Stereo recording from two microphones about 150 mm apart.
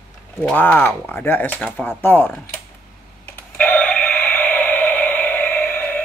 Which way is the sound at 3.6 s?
10° left (ahead or behind).